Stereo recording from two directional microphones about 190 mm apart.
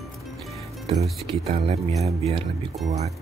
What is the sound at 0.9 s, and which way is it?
Speech, centre (ahead or behind).